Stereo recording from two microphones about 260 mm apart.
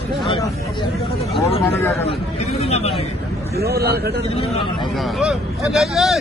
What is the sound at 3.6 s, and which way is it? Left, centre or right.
Speech, right.